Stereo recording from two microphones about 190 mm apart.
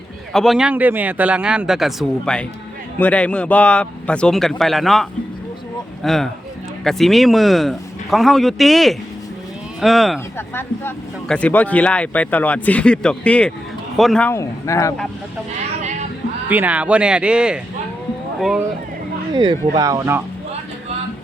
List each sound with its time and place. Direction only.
0.3 s speech: centre (ahead or behind)
10.3 s speech: 10° left (ahead or behind)
16.5 s speech: 10° right (ahead or behind)
19.3 s speech: 25° right (ahead or behind)